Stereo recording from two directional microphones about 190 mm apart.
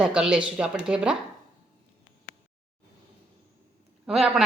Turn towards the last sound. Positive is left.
turn(degrees=0)  # may be behind; listen again after turning